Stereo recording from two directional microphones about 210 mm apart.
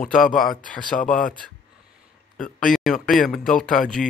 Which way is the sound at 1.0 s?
40° left (ahead or behind).